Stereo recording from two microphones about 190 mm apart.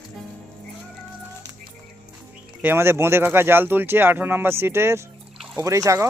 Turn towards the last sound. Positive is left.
turn(degrees=-15)  # may be behind; listen again after turning